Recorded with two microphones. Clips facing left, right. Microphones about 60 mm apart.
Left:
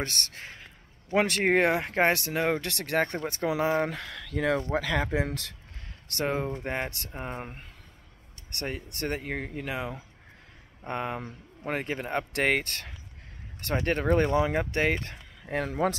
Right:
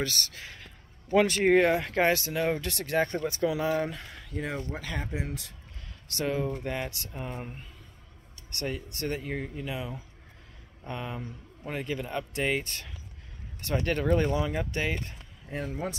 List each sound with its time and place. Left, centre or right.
0.0 s a man's voice: left
1.7 s speech: left
3.2 s a man's voice: left
3.9 s speech: left
5.1 s speech: left
6.0 s a man's voice: left
12.3 s speech: left
13.7 s a man's voice: left
15.0 s speech: left